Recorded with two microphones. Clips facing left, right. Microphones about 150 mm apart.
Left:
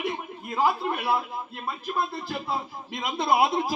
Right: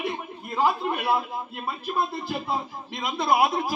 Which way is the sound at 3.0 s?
25° left (ahead or behind).